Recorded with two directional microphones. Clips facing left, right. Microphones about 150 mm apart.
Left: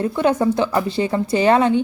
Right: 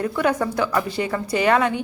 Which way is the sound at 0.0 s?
25° left (ahead or behind).